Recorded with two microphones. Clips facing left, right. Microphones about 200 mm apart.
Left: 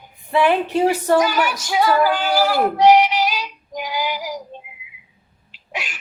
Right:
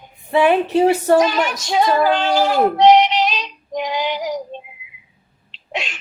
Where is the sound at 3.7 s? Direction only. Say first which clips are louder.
Right 4 dB; 25° right (ahead or behind).